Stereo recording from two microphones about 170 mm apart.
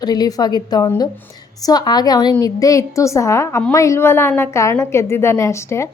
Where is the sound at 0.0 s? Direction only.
25° left (ahead or behind).